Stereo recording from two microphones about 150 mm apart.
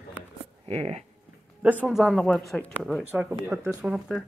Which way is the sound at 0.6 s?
40° right (ahead or behind).